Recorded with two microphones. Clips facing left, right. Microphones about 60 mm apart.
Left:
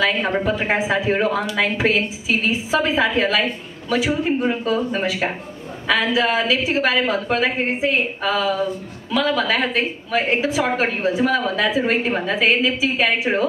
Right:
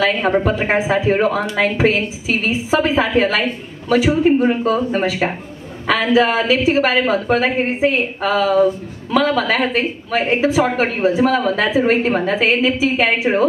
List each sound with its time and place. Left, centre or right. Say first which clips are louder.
0.0 s speech: right 4 dB; right
6.5 s a woman's voice: right 5 dB; right
6.8 s a woman's voice: right 3 dB; right
8.3 s speech: right 4 dB; right
9.1 s speech: right 3 dB; right
11.2 s a woman's voice: right 3 dB; right